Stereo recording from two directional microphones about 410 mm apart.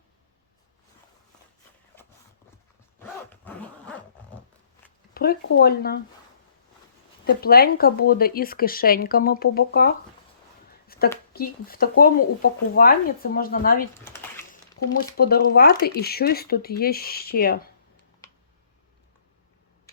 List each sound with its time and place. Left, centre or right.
3.0 s zipper: centre
5.1 s speech: left
7.3 s speech: left
10.7 s a sound: left
11.3 s speech: left
14.8 s speech: left
15.2 s speech: left